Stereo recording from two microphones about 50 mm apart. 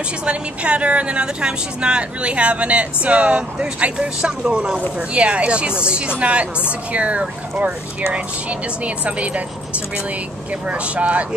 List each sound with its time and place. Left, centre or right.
0.2 s speech: right
10.7 s speech: right